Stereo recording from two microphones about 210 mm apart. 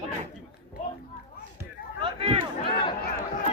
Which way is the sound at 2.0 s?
25° right (ahead or behind).